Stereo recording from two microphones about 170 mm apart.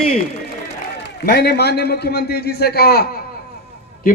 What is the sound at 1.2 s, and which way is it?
A man's voice, 70° left (ahead or behind).